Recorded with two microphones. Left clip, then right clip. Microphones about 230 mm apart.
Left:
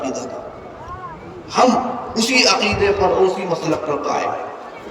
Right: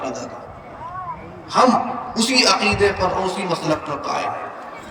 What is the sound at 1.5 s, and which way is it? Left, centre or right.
A man's voice, right.